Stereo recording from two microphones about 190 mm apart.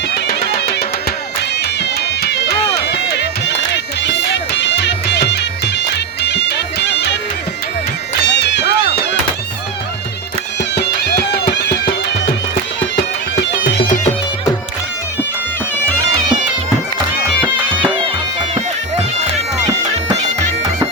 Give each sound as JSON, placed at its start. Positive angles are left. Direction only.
{"t": 0.1, "sound": "music", "side_deg": 55}
{"t": 8.2, "sound": "music", "side_deg": 65}
{"t": 10.8, "sound": "music", "side_deg": 60}